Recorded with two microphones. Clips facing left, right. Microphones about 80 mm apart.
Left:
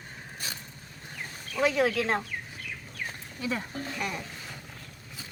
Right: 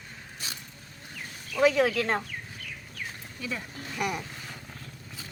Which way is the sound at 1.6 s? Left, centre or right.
Centre.